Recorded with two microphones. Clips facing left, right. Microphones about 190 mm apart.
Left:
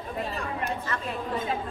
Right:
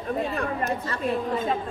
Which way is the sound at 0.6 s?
35° right (ahead or behind).